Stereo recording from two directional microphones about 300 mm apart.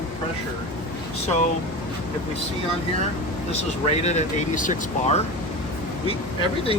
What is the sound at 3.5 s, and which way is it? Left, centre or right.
Speech, left.